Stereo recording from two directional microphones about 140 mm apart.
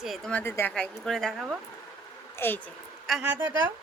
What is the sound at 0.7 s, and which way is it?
Speech, 5° left (ahead or behind).